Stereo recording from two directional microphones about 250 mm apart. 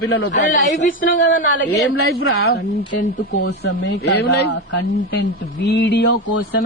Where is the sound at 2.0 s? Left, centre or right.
Left.